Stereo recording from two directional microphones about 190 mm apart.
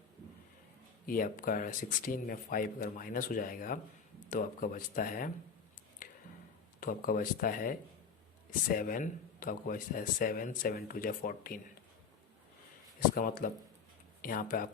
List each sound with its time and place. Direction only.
1.0 s speech: 45° left (ahead or behind)
6.0 s a sound: 45° left (ahead or behind)
6.7 s speech: 45° left (ahead or behind)
13.1 s speech: 45° left (ahead or behind)